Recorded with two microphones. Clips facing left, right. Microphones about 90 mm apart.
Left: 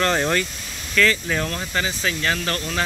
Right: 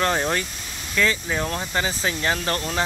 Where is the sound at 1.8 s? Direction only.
30° right (ahead or behind).